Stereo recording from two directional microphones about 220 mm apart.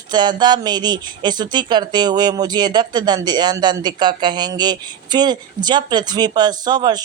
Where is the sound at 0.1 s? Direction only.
20° right (ahead or behind).